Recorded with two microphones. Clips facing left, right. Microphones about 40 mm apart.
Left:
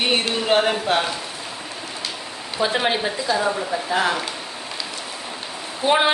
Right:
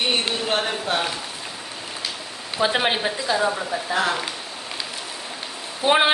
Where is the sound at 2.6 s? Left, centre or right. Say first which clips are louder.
Even; right.